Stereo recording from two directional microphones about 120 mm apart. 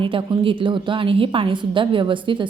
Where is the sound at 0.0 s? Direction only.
45° right (ahead or behind).